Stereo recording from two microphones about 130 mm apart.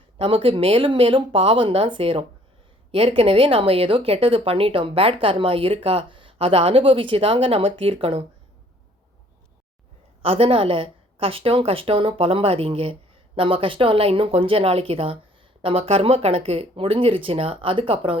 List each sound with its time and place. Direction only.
0.2 s speech: 40° right (ahead or behind)
10.2 s speech: 45° right (ahead or behind)